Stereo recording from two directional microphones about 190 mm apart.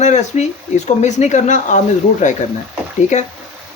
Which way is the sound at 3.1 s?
40° left (ahead or behind).